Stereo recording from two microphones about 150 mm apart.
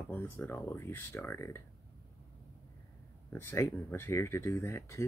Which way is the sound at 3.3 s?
15° left (ahead or behind).